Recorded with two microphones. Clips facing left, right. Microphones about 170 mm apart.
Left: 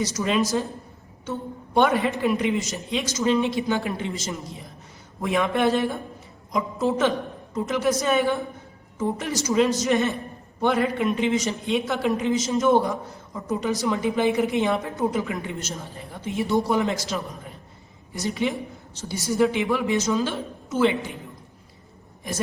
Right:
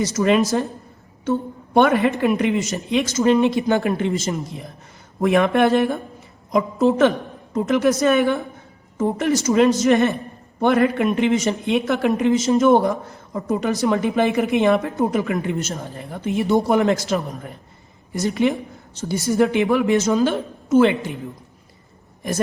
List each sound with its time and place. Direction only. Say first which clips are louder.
0.0 s a woman's voice: right 6 dB; 65° right (ahead or behind)